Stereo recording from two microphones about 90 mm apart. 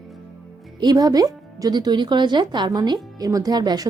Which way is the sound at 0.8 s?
45° right (ahead or behind).